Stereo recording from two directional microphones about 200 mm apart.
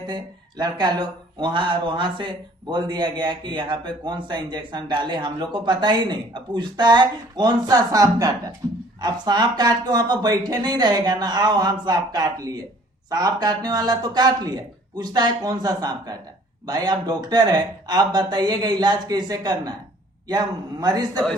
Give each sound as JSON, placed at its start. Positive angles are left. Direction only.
{"t": 0.1, "sound": "speech", "side_deg": -20}